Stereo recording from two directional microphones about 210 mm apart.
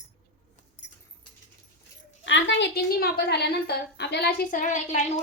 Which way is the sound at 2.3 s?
60° left (ahead or behind).